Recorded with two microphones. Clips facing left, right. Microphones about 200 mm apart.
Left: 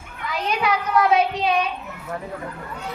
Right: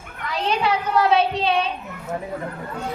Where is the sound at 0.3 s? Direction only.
30° right (ahead or behind).